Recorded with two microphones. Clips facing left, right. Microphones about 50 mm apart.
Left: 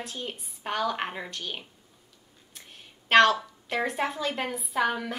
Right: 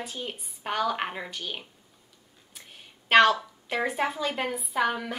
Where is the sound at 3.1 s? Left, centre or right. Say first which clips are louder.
Even; centre.